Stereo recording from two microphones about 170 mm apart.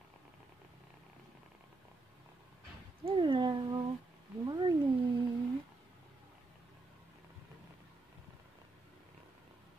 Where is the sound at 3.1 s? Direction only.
30° right (ahead or behind).